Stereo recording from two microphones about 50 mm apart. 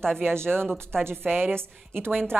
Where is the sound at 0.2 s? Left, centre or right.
Right.